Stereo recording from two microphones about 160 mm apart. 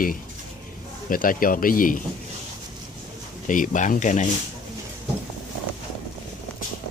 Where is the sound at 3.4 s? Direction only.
55° left (ahead or behind).